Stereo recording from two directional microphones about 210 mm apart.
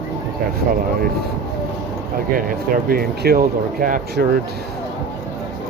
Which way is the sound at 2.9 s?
45° right (ahead or behind).